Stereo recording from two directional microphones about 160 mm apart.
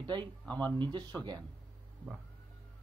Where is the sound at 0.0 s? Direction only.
30° right (ahead or behind).